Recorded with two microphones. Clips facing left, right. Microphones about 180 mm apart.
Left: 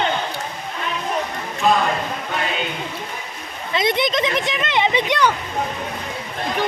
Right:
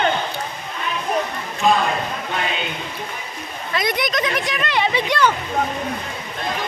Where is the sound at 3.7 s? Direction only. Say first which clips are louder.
Left 3 dB; 25° left (ahead or behind).